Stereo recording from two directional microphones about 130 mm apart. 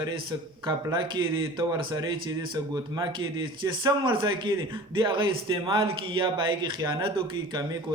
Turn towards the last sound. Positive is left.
turn(degrees=-35)  # may be behind; listen again after turning